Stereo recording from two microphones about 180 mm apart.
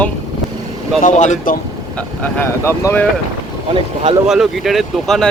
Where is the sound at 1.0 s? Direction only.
45° left (ahead or behind).